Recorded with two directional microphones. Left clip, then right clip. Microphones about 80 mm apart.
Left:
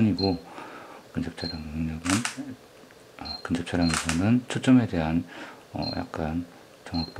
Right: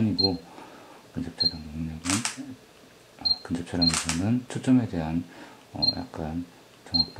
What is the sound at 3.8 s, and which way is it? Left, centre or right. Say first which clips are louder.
Speech: right 5 dB; centre.